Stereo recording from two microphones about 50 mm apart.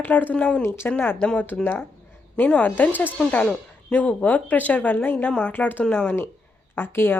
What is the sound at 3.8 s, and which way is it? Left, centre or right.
A woman's voice, left.